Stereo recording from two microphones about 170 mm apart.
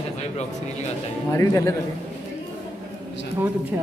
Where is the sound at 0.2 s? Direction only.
40° left (ahead or behind).